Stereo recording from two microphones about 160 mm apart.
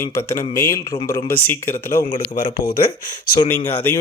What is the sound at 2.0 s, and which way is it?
Speech, 60° left (ahead or behind).